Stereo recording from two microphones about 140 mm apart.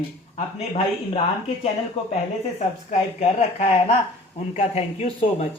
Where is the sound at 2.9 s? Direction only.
55° left (ahead or behind).